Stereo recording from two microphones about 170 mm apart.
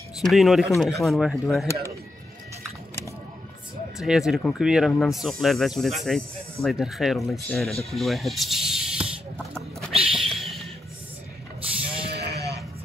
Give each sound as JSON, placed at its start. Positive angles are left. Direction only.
{"t": 0.2, "sound": "speech", "side_deg": 0}
{"t": 4.0, "sound": "speech", "side_deg": -5}
{"t": 7.8, "sound": "snake", "side_deg": 0}
{"t": 12.1, "sound": "music", "side_deg": -75}